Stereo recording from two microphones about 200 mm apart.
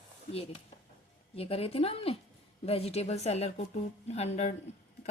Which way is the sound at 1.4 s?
30° left (ahead or behind).